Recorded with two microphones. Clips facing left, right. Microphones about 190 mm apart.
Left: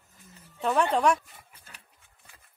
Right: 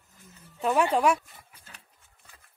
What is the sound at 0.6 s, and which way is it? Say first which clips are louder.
Speech: right 1 dB; 5° right (ahead or behind).